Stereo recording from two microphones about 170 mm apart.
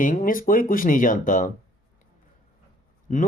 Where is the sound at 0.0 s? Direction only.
50° left (ahead or behind).